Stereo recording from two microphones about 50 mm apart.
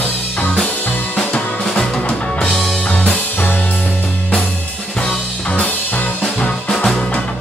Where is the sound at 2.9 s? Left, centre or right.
Left.